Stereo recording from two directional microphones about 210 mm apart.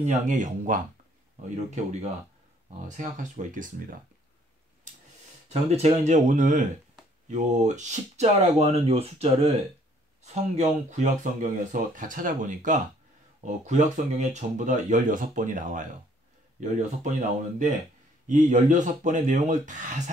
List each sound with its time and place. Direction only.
0.0 s speech: 35° right (ahead or behind)
1.8 s speech: 35° right (ahead or behind)
5.5 s speech: 30° right (ahead or behind)